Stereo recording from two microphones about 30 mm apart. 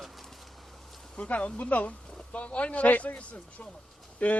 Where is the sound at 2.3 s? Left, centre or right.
Left.